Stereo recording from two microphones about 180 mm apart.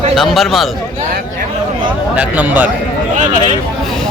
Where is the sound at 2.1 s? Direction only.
10° right (ahead or behind).